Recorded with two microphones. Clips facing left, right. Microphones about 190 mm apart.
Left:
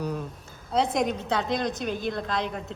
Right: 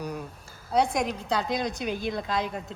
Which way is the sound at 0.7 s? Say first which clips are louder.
Even; centre (ahead or behind).